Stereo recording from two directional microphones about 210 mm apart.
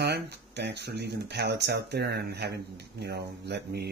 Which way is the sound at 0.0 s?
55° right (ahead or behind).